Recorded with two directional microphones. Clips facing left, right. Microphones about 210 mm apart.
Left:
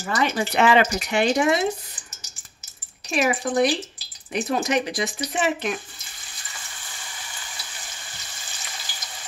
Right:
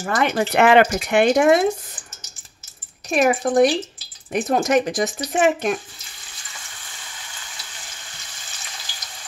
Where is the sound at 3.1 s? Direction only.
50° right (ahead or behind).